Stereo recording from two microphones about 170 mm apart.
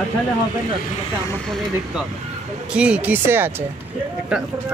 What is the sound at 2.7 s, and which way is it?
Speech, 5° right (ahead or behind).